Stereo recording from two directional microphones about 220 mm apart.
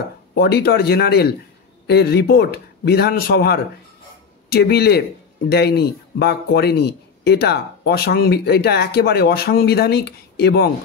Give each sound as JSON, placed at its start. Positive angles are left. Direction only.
{"t": 0.3, "sound": "speech", "side_deg": 50}